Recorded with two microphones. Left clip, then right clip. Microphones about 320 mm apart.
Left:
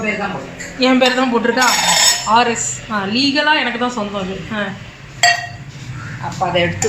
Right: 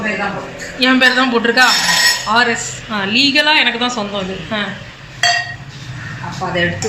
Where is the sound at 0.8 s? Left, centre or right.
Centre.